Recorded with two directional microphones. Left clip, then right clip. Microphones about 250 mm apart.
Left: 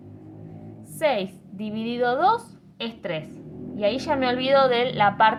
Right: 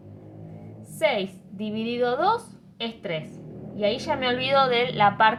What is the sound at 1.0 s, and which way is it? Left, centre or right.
A woman's voice, centre.